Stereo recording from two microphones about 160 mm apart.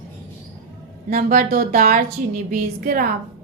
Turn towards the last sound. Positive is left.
turn(degrees=-65)  # may be behind; listen again after turning